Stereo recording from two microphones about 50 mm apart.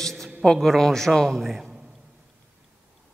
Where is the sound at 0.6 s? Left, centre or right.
Centre.